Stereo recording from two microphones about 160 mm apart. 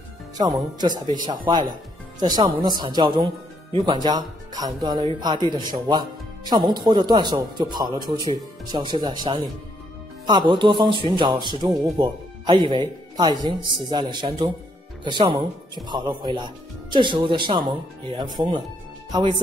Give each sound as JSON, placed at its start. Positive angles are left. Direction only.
{"t": 0.4, "sound": "a man's voice", "side_deg": -25}
{"t": 6.4, "sound": "a man's voice", "side_deg": -25}